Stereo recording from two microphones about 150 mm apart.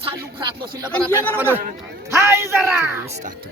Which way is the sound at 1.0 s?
15° right (ahead or behind).